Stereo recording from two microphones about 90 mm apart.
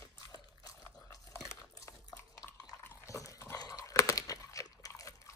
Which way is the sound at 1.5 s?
35° left (ahead or behind).